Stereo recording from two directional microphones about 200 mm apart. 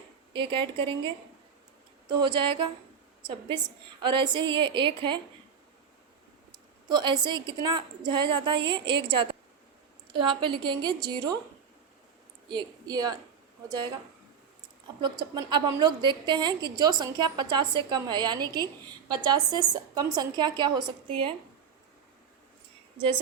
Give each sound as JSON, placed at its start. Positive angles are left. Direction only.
{"t": 0.3, "sound": "a woman's voice", "side_deg": -25}
{"t": 4.0, "sound": "a woman's voice", "side_deg": -25}
{"t": 6.8, "sound": "a woman's voice", "side_deg": -20}
{"t": 10.1, "sound": "a woman's voice", "side_deg": -25}
{"t": 12.5, "sound": "a woman's voice", "side_deg": -20}
{"t": 15.0, "sound": "a woman's voice", "side_deg": -20}
{"t": 23.0, "sound": "a woman's voice", "side_deg": -25}